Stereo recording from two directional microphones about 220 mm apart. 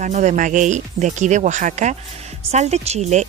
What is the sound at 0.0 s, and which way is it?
Speech, 35° right (ahead or behind).